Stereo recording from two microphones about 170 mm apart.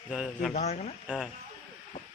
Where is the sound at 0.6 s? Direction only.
40° left (ahead or behind).